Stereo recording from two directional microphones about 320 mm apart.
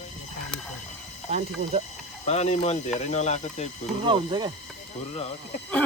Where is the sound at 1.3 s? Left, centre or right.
Right.